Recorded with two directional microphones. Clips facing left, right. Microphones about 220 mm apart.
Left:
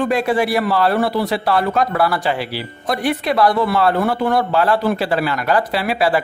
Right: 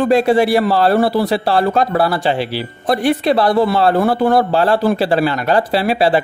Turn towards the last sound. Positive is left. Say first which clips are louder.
# right 4 dB
turn(degrees=-30)  # may be behind; listen again after turning